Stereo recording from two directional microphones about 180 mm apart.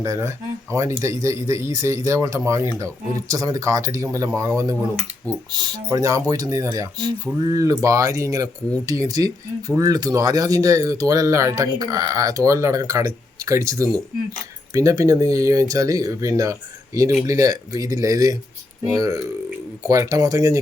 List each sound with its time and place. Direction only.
0.0 s speech: 15° right (ahead or behind)